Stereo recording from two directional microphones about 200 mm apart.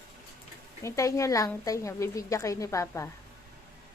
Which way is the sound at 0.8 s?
15° left (ahead or behind).